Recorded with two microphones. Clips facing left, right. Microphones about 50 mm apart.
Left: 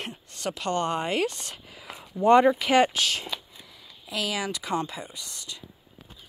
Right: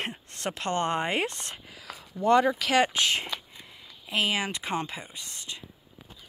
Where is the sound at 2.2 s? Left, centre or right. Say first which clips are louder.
Left 4 dB; centre.